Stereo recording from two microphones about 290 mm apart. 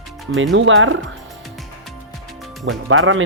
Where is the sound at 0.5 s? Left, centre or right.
Right.